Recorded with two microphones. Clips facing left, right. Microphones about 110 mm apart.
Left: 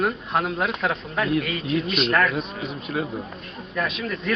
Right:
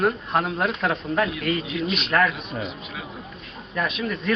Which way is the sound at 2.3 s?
45° left (ahead or behind).